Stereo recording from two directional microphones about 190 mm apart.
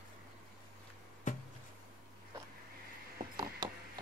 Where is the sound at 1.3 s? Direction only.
40° left (ahead or behind).